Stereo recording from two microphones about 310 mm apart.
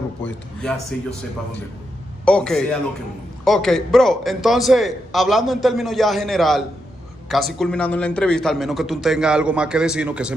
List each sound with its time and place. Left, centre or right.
0.2 s a man's voice: centre
2.2 s a man's voice: centre